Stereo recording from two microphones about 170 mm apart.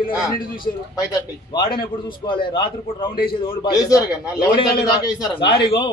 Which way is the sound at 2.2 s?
30° left (ahead or behind).